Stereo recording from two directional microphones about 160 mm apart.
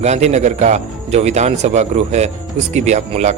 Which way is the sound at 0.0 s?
45° right (ahead or behind).